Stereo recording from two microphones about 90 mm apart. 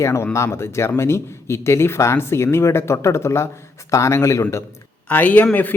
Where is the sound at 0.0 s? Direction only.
30° left (ahead or behind).